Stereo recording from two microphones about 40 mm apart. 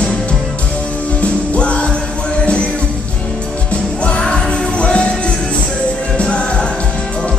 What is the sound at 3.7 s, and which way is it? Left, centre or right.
Music, left.